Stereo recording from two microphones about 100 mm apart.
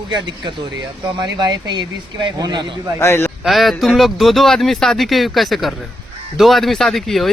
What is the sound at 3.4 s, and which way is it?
Speech, centre (ahead or behind).